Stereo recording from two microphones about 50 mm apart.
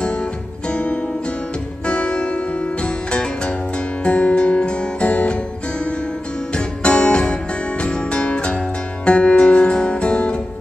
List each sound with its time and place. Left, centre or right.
0.7 s music: left
6.5 s music: left